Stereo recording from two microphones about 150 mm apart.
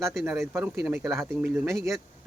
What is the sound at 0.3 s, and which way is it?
Speech, 15° right (ahead or behind).